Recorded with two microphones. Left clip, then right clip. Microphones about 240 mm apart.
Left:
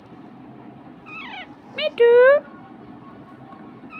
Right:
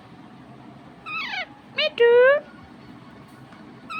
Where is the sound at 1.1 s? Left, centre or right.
Right.